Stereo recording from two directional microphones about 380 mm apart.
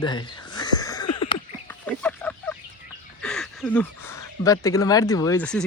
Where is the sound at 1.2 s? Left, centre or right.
Centre.